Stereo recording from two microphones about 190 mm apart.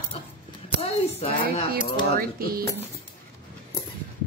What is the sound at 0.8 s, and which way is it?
A child's voice, 30° left (ahead or behind).